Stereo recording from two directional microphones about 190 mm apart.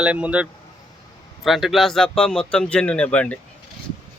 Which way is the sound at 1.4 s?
Centre (ahead or behind).